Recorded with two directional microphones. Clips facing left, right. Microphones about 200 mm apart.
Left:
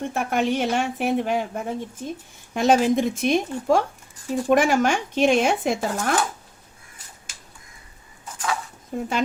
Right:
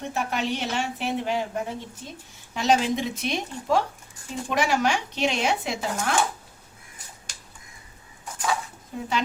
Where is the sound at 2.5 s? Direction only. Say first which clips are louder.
Left 5 dB; 50° left (ahead or behind).